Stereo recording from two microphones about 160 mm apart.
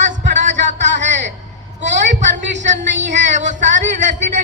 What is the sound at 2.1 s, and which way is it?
A woman's voice, 50° right (ahead or behind).